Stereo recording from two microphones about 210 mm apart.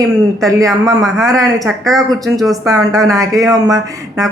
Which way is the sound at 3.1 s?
15° right (ahead or behind).